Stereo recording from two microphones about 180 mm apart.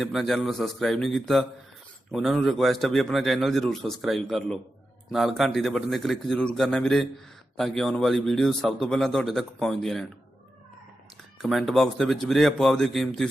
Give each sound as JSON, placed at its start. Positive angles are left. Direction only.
{"t": 0.0, "sound": "a man's voice", "side_deg": 0}
{"t": 11.4, "sound": "a man's voice", "side_deg": 0}